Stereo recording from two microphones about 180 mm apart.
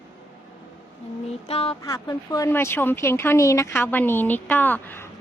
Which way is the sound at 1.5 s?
35° left (ahead or behind).